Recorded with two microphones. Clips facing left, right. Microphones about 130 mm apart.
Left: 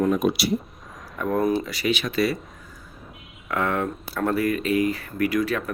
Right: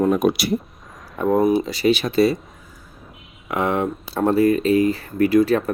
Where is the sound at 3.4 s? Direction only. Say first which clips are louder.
Right 4 dB; 20° right (ahead or behind).